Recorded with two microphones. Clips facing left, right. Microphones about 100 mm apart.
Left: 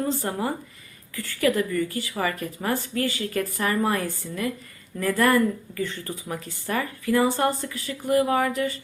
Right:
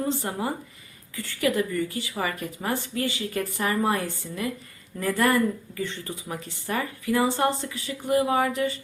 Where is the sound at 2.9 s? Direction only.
25° right (ahead or behind).